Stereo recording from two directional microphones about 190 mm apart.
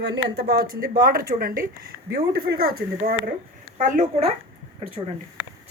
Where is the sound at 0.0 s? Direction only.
65° right (ahead or behind).